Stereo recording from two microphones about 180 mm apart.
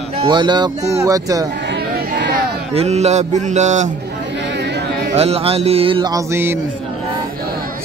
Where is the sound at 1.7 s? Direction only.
75° right (ahead or behind).